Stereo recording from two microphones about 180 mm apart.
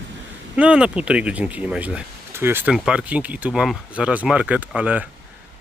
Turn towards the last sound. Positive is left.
turn(degrees=-5)  # may be behind; listen again after turning